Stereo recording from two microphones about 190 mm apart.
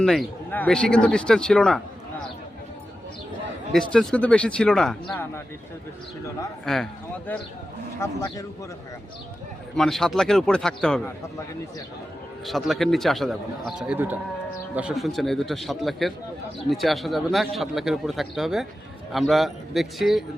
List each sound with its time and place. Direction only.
0.0 s a man's voice: 5° left (ahead or behind)
3.7 s a man's voice: 5° left (ahead or behind)
6.7 s a man's voice: centre (ahead or behind)
7.9 s speech: 15° left (ahead or behind)
9.7 s a man's voice: centre (ahead or behind)
12.5 s a man's voice: centre (ahead or behind)